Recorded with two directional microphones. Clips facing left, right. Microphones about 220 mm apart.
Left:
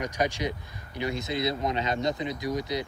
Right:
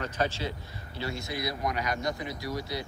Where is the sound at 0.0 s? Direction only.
15° left (ahead or behind).